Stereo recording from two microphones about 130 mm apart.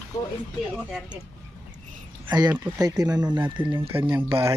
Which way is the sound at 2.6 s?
30° right (ahead or behind).